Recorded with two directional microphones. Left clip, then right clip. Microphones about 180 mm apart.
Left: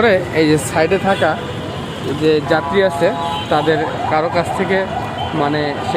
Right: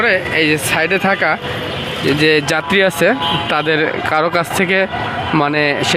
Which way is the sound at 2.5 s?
40° right (ahead or behind).